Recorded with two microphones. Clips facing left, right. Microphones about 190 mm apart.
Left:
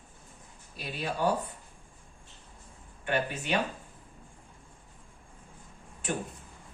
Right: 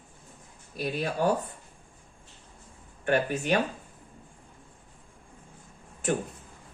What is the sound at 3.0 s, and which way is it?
Speech, 45° right (ahead or behind).